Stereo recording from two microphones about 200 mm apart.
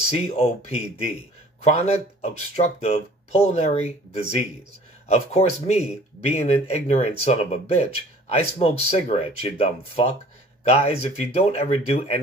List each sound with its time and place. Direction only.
0.1 s speech: 30° left (ahead or behind)